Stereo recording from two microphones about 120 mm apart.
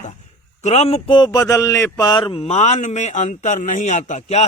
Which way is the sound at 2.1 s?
45° left (ahead or behind).